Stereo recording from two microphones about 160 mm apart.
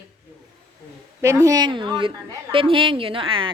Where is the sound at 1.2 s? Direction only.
20° right (ahead or behind).